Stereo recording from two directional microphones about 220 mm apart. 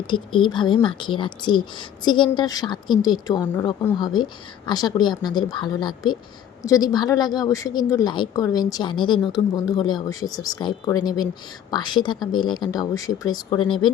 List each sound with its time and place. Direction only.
0.1 s a woman's voice: 20° left (ahead or behind)